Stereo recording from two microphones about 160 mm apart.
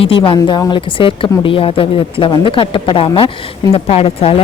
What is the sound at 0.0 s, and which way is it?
Speech, 35° left (ahead or behind).